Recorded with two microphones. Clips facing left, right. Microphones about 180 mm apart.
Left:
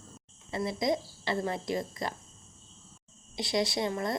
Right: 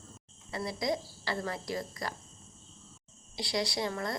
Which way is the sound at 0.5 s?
20° left (ahead or behind).